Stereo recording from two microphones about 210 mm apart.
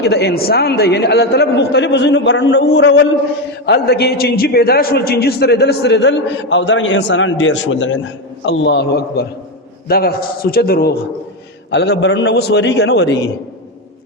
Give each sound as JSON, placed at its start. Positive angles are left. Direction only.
{"t": 0.0, "sound": "a man's voice", "side_deg": 50}